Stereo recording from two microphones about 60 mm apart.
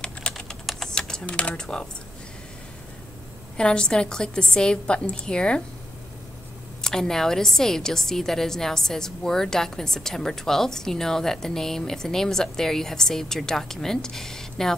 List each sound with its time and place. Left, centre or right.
0.7 s typing: centre
0.9 s speech: centre
3.5 s a woman's voice: centre
6.8 s a woman's voice: centre